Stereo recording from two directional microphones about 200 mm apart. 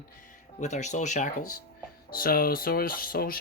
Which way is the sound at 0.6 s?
35° left (ahead or behind).